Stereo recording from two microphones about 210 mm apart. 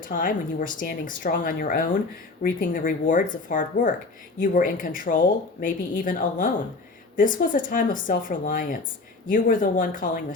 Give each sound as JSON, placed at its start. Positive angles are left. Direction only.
{"t": 0.0, "sound": "speech", "side_deg": 40}